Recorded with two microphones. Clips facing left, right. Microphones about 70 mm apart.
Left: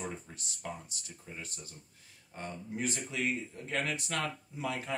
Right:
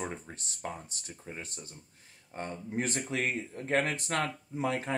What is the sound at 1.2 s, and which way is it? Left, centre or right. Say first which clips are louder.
Speech: right 3 dB; right.